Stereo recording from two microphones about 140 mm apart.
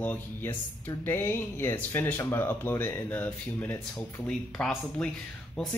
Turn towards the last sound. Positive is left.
turn(degrees=5)  # may be behind; listen again after turning